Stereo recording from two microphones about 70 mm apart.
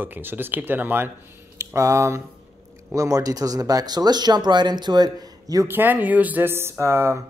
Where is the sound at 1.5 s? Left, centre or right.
Right.